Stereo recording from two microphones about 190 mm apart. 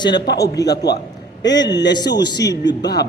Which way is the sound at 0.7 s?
60° left (ahead or behind).